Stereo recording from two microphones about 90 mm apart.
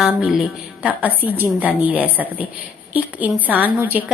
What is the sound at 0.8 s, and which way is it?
A woman's voice, 15° right (ahead or behind).